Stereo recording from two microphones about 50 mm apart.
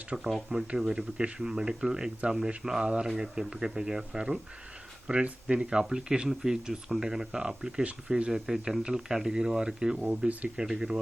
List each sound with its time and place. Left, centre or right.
0.1 s speech: centre